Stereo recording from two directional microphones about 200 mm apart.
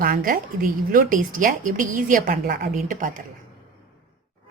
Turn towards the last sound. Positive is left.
turn(degrees=-45)  # may be behind; listen again after turning